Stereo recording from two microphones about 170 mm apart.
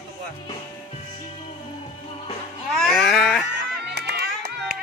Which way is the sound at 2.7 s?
Centre (ahead or behind).